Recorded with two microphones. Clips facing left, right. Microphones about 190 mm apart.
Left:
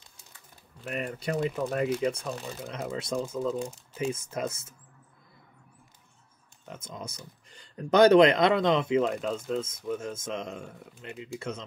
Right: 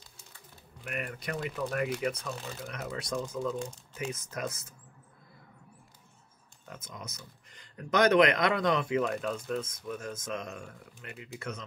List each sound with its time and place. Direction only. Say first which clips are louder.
0.8 s speech: left 5 dB; 30° left (ahead or behind)
6.7 s speech: left 4 dB; 25° left (ahead or behind)